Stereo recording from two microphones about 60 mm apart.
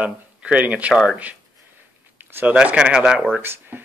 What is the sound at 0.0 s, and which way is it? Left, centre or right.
Speech, right.